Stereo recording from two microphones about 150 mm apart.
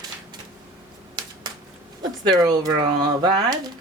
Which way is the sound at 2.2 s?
25° right (ahead or behind).